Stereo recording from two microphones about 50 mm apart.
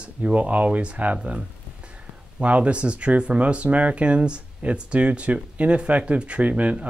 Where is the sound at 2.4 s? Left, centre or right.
Right.